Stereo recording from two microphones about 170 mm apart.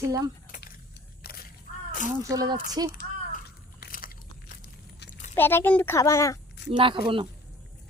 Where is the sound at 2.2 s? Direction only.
20° right (ahead or behind).